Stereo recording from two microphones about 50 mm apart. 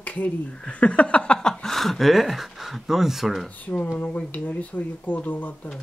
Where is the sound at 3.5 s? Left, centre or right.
Left.